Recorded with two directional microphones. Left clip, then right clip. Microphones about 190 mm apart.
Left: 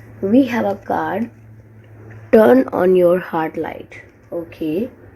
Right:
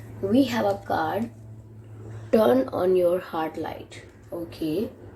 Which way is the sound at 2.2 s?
50° left (ahead or behind).